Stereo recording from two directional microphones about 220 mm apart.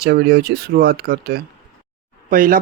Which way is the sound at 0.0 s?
45° right (ahead or behind).